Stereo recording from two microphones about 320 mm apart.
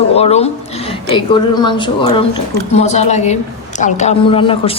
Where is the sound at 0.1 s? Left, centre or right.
Centre.